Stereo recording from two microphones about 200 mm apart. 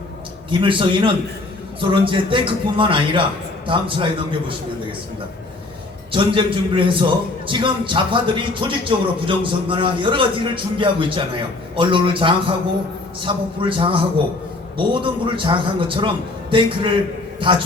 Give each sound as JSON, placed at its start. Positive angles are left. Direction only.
{"t": 0.6, "sound": "a man's voice", "side_deg": -25}
{"t": 6.1, "sound": "a man's voice", "side_deg": -25}
{"t": 15.0, "sound": "a man's voice", "side_deg": -25}